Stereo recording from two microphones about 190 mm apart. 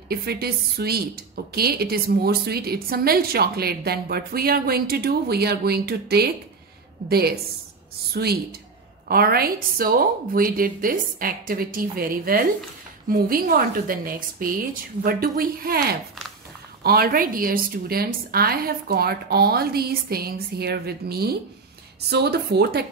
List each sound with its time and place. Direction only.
0.1 s a woman's voice: 55° right (ahead or behind)